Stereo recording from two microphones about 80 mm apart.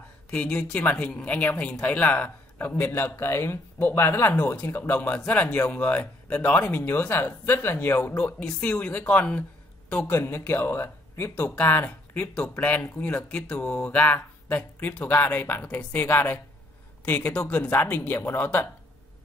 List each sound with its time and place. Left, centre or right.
0.3 s speech: centre
6.9 s a man's voice: left
10.1 s speech: left